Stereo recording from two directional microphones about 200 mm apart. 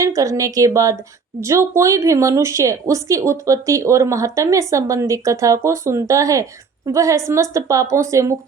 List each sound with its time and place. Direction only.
0.0 s speech: 15° right (ahead or behind)